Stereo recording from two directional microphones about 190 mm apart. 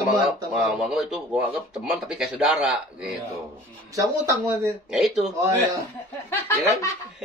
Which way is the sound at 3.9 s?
15° right (ahead or behind).